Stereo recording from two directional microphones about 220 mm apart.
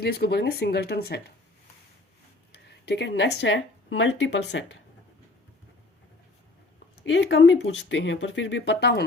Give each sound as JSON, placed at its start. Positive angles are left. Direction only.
{"t": 0.0, "sound": "speech", "side_deg": 50}
{"t": 2.5, "sound": "speech", "side_deg": 50}
{"t": 7.0, "sound": "speech", "side_deg": 55}